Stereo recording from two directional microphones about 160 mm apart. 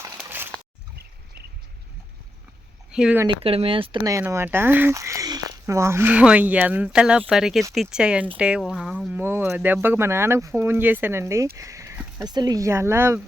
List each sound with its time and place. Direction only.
2.9 s speech: 5° right (ahead or behind)
3.2 s speech: 35° right (ahead or behind)
4.2 s speech: 15° right (ahead or behind)
11.5 s a sound: 20° right (ahead or behind)
12.3 s speech: 25° right (ahead or behind)